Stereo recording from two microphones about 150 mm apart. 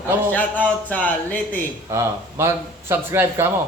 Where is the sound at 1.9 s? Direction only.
20° right (ahead or behind).